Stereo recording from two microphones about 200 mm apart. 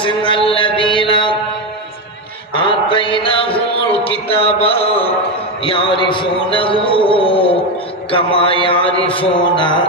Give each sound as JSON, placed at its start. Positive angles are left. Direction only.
{"t": 0.0, "sound": "music", "side_deg": 25}
{"t": 0.5, "sound": "mantra", "side_deg": 25}
{"t": 2.5, "sound": "a sound", "side_deg": 25}
{"t": 8.1, "sound": "speech", "side_deg": 25}
{"t": 8.6, "sound": "mantra", "side_deg": 25}